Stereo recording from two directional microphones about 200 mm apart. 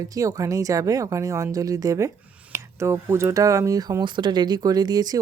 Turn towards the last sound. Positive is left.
turn(degrees=-20)  # may be behind; listen again after turning